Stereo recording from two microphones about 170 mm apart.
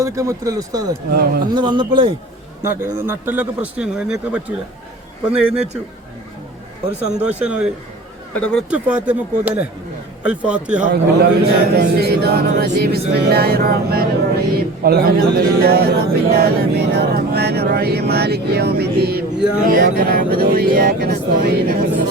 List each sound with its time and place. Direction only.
0.0 s speech: 20° right (ahead or behind)
1.1 s speech: 60° right (ahead or behind)
1.5 s speech: 30° right (ahead or behind)
2.6 s speech: 15° right (ahead or behind)
7.3 s speech: 10° right (ahead or behind)
8.3 s speech: 5° left (ahead or behind)
8.7 s speech: 10° right (ahead or behind)
10.8 s a man's voice: 70° right (ahead or behind)